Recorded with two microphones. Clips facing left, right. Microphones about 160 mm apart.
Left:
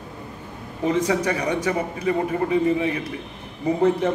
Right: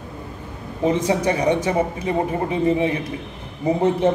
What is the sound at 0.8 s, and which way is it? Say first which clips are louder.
A man's voice: right 2 dB; 25° right (ahead or behind).